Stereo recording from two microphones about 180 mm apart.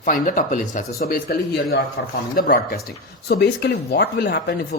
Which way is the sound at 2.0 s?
75° left (ahead or behind).